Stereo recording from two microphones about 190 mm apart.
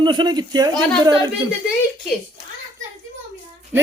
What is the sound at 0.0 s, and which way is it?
Speech, 25° right (ahead or behind).